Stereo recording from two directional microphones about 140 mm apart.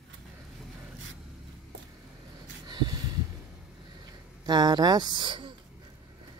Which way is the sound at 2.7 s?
30° right (ahead or behind).